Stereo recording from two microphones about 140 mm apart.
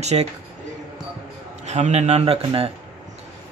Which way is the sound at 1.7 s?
55° right (ahead or behind).